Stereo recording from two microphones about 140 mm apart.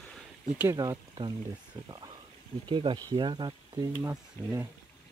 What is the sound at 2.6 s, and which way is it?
Speech, 35° right (ahead or behind).